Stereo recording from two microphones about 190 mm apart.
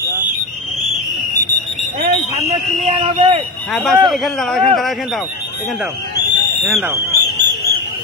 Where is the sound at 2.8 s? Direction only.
30° right (ahead or behind).